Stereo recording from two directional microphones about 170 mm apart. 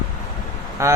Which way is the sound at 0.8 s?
15° right (ahead or behind).